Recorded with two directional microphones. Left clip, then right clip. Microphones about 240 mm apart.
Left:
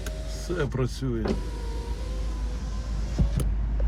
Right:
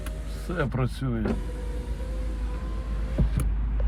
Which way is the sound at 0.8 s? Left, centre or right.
Right.